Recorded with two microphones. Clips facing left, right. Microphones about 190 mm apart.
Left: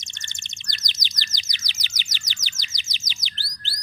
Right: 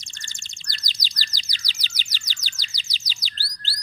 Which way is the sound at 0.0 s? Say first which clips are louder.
Left 1 dB; 20° left (ahead or behind).